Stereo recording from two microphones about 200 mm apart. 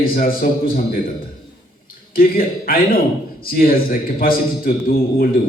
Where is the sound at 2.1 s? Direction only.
45° left (ahead or behind).